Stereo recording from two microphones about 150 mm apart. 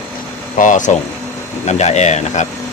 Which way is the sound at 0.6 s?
60° left (ahead or behind).